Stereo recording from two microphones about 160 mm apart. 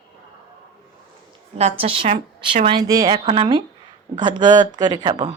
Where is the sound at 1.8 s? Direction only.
35° right (ahead or behind).